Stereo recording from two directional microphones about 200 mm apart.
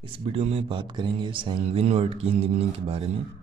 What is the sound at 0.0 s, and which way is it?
Speech, 30° right (ahead or behind).